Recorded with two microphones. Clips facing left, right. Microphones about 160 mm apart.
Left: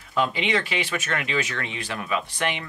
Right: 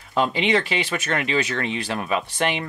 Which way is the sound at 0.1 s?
30° right (ahead or behind).